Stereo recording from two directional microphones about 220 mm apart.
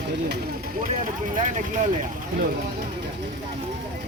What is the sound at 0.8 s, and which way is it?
Speech, 40° right (ahead or behind).